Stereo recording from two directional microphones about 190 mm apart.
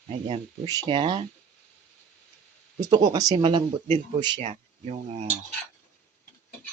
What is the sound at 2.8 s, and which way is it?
Speech, 20° right (ahead or behind).